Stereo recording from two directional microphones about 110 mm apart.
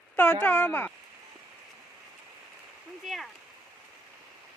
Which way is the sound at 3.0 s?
Centre (ahead or behind).